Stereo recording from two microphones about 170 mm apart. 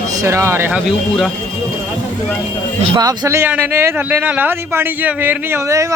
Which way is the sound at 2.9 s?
25° right (ahead or behind).